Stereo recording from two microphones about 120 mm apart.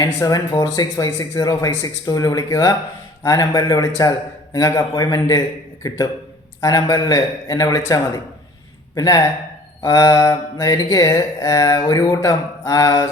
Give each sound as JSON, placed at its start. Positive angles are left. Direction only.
{"t": 0.2, "sound": "speech", "side_deg": 30}
{"t": 6.6, "sound": "speech", "side_deg": 30}
{"t": 9.0, "sound": "mantra", "side_deg": 30}